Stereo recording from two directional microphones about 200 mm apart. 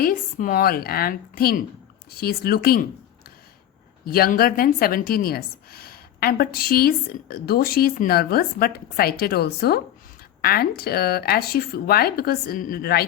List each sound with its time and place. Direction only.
0.0 s a woman's voice: 45° left (ahead or behind)
4.0 s a woman's voice: 50° left (ahead or behind)